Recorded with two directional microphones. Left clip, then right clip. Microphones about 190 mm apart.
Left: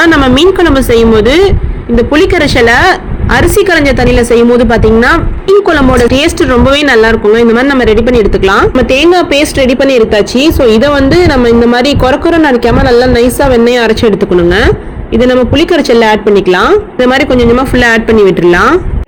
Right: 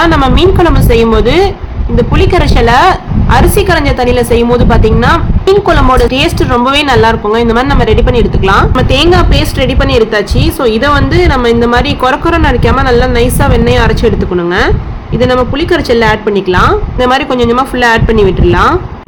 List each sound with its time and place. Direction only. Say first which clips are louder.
0.0 s a woman's voice: left 2 dB; 20° left (ahead or behind)
15.2 s a woman's voice: left 2 dB; 20° left (ahead or behind)